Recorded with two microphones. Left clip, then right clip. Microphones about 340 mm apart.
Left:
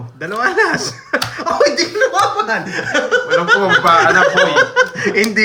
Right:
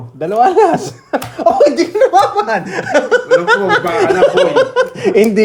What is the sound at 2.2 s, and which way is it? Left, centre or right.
Speech, centre.